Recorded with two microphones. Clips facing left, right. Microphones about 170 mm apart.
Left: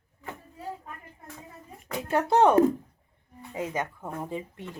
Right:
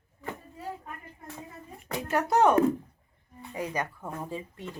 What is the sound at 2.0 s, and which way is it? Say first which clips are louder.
Speech: left 2 dB; 25° left (ahead or behind).